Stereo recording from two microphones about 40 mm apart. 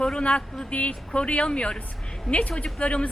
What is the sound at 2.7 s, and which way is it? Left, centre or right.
Speech, left.